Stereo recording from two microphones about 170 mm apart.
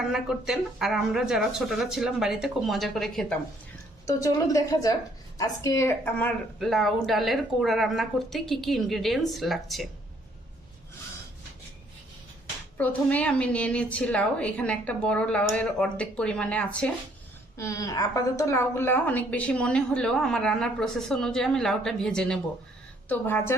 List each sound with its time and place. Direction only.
0.1 s a woman's voice: 5° right (ahead or behind)
4.0 s a woman's voice: 20° left (ahead or behind); by 9.9 s centre (ahead or behind)
12.7 s a woman's voice: 10° left (ahead or behind)
17.6 s a woman's voice: 20° left (ahead or behind)